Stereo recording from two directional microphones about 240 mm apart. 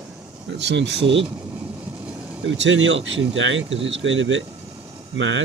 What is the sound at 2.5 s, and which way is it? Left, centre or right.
Speech, right.